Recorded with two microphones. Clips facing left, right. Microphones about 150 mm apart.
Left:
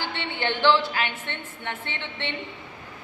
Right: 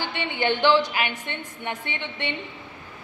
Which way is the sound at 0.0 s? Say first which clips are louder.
Right 3 dB; 15° right (ahead or behind).